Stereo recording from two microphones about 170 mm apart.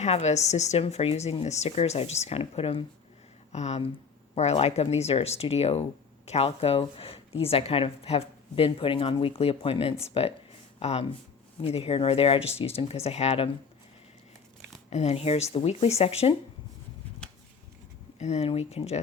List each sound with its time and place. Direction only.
0.0 s speech: 40° left (ahead or behind)
14.8 s speech: 40° left (ahead or behind)
18.2 s speech: 40° left (ahead or behind)